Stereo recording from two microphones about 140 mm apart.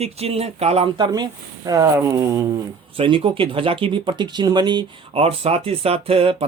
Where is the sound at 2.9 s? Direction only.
40° right (ahead or behind).